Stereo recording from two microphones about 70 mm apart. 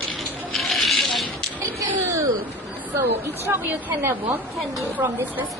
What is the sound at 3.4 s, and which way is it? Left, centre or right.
Speech, right.